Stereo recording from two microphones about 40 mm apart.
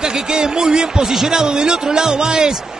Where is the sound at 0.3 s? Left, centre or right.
Centre.